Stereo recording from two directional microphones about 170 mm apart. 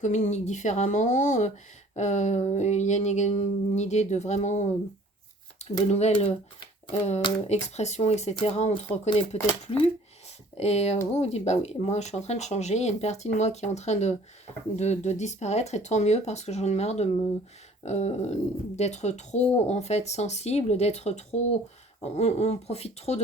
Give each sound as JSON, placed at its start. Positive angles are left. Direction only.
{"t": 0.0, "sound": "a sound", "side_deg": 45}
{"t": 5.9, "sound": "speech", "side_deg": 45}
{"t": 10.6, "sound": "speech", "side_deg": 40}